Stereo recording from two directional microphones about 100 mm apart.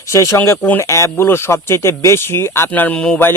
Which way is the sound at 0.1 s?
30° left (ahead or behind).